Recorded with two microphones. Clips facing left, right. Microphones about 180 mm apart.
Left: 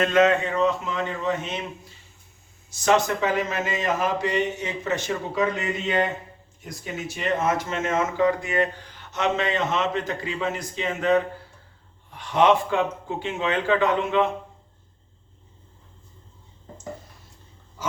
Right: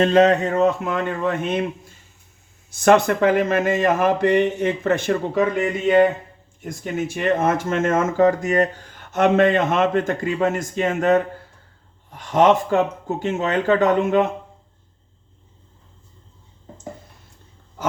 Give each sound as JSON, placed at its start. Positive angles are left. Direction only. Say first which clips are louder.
{"t": 0.0, "sound": "speech", "louder": "right 4 dB", "side_deg": -35}